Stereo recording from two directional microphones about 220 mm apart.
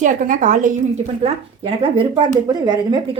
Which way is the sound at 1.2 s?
25° right (ahead or behind).